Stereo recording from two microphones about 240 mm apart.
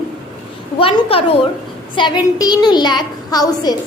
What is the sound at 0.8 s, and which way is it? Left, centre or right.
A woman's voice, left.